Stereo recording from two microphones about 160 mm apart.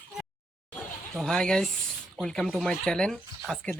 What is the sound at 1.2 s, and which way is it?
Speech, 5° left (ahead or behind).